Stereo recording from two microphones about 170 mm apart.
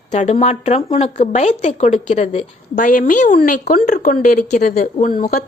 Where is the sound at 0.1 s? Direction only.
40° left (ahead or behind).